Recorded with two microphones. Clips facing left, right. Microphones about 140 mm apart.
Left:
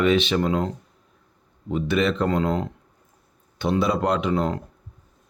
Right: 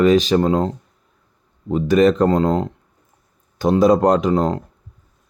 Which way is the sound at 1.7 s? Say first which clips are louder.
Right 8 dB; 40° right (ahead or behind).